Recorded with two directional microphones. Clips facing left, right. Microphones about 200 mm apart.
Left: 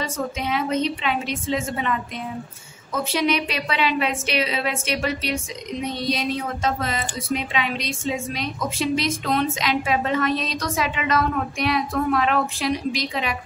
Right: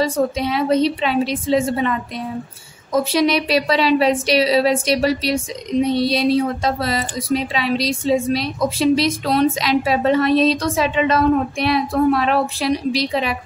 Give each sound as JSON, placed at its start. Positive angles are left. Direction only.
{"t": 0.0, "sound": "a woman's voice", "side_deg": -35}